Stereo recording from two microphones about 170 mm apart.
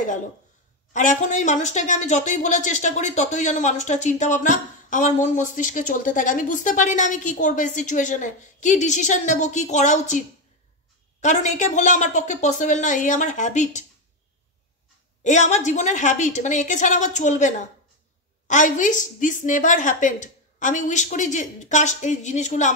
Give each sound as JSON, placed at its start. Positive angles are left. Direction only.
{"t": 0.9, "sound": "speech", "side_deg": 45}
{"t": 15.2, "sound": "speech", "side_deg": 45}